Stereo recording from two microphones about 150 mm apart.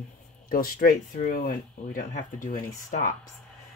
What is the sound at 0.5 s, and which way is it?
Speech, 70° left (ahead or behind).